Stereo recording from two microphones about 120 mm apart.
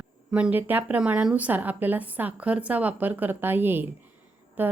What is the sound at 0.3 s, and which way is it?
Speech, 10° right (ahead or behind).